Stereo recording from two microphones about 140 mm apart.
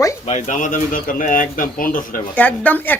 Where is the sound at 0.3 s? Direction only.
65° left (ahead or behind); by 2.2 s 80° left.